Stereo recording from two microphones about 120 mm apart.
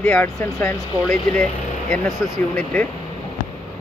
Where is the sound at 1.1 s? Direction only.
10° left (ahead or behind).